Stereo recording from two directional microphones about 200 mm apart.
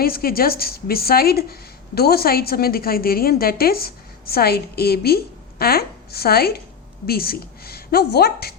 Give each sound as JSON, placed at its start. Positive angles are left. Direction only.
{"t": 0.0, "sound": "a woman's voice", "side_deg": 50}